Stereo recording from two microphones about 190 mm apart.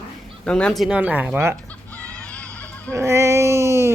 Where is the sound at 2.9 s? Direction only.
15° right (ahead or behind).